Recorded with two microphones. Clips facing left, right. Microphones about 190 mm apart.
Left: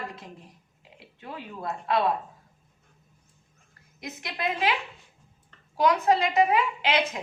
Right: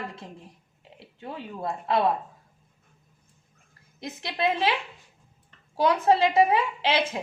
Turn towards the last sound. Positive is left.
turn(degrees=-30)  # may be behind; listen again after turning